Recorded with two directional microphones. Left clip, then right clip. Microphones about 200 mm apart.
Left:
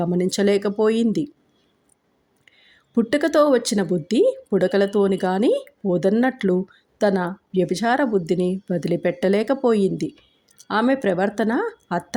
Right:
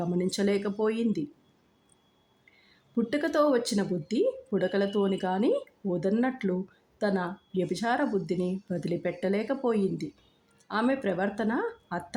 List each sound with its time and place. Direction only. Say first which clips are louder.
0.0 s speech: left 8 dB; 20° left (ahead or behind)
2.6 s speech: left 9 dB; 25° left (ahead or behind)